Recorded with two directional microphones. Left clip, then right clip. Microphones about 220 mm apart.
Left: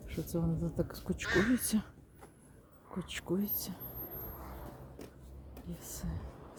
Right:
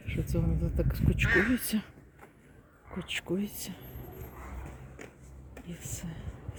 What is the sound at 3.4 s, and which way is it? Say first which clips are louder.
Speech: right 2 dB; 45° left (ahead or behind).